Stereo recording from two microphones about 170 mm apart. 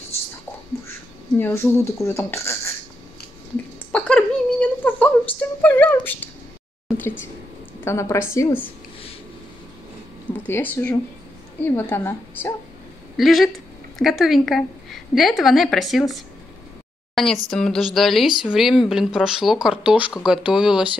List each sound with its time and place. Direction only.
1.4 s speech: 15° left (ahead or behind)
3.9 s a sound: 10° left (ahead or behind)
7.8 s speech: 15° left (ahead or behind)
10.3 s speech: 10° left (ahead or behind)
13.2 s speech: centre (ahead or behind)